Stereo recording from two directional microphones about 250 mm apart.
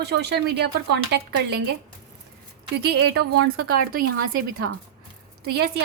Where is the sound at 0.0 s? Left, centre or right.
Right.